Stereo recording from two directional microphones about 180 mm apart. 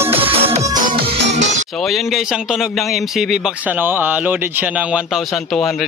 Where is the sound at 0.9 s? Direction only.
35° right (ahead or behind).